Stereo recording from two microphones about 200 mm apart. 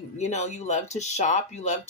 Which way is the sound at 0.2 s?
35° left (ahead or behind).